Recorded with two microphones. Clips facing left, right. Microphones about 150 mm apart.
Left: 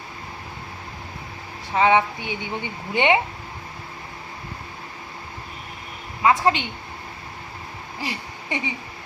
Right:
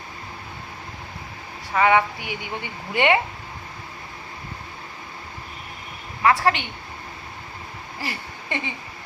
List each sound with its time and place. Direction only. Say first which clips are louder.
1.7 s speech: even; 20° left (ahead or behind)
6.2 s speech: left 1 dB; 20° left (ahead or behind)
8.0 s a sound: left 2 dB; 15° left (ahead or behind)